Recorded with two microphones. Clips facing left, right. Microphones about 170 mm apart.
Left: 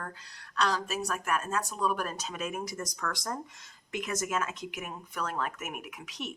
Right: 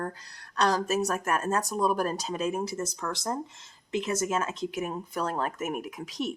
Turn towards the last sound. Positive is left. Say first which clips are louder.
# right 8 dB
turn(degrees=-35)  # may be behind; listen again after turning